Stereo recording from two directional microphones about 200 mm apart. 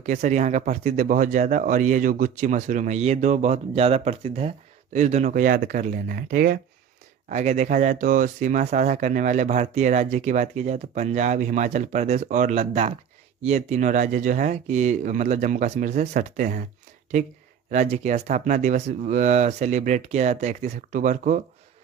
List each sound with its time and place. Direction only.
0.0 s speech: 40° right (ahead or behind)
17.7 s speech: 35° right (ahead or behind)